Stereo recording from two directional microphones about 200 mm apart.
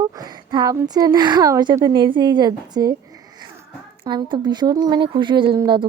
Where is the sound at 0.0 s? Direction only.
20° right (ahead or behind).